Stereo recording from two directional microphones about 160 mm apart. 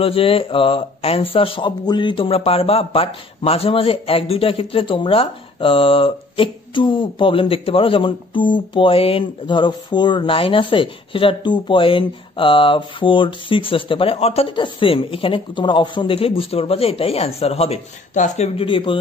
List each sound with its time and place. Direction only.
0.0 s speech: 35° left (ahead or behind)